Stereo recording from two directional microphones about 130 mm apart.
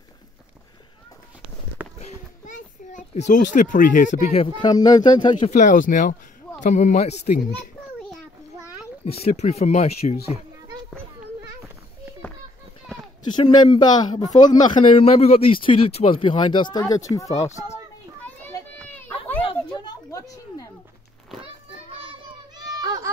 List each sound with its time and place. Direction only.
2.0 s a sound: 65° left (ahead or behind)
4.4 s speech: 35° left (ahead or behind)
5.6 s speech: 85° left
6.6 s a child's voice: 70° left (ahead or behind)
9.0 s speech: 50° left (ahead or behind)
13.3 s speech: 35° left (ahead or behind)
16.8 s speech: 25° left (ahead or behind)
18.8 s children playing: 15° left (ahead or behind)
20.1 s a sound: 25° left (ahead or behind)
22.7 s a sound: 30° right (ahead or behind)